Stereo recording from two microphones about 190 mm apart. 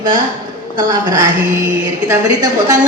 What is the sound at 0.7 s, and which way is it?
A woman's voice, 20° right (ahead or behind).